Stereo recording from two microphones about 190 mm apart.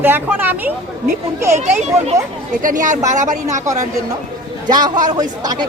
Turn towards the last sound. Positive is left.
turn(degrees=-20)  # may be behind; listen again after turning